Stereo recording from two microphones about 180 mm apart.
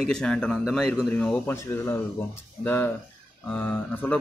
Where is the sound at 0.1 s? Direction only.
5° left (ahead or behind).